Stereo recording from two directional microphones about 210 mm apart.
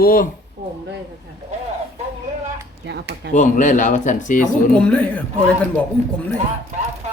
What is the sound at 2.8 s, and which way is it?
Speech, 55° right (ahead or behind).